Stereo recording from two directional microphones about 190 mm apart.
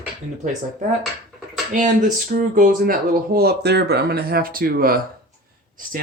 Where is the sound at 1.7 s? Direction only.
40° right (ahead or behind).